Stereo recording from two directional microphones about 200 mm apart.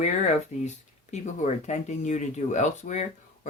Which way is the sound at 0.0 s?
35° left (ahead or behind).